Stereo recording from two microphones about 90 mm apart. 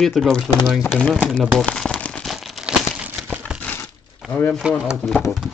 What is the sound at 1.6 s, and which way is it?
Crumpling, 10° left (ahead or behind).